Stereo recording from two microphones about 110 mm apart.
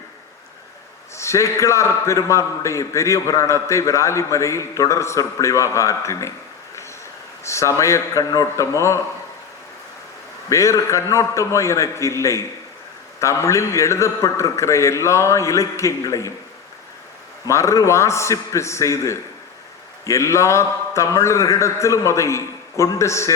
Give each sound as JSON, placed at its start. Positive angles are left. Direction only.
{"t": 1.1, "sound": "a man's voice", "side_deg": 25}
{"t": 7.4, "sound": "a man's voice", "side_deg": 25}
{"t": 10.5, "sound": "a man's voice", "side_deg": 30}
{"t": 17.4, "sound": "a man's voice", "side_deg": 30}